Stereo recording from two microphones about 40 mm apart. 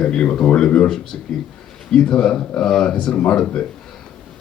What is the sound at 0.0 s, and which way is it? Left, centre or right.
A man's voice, centre.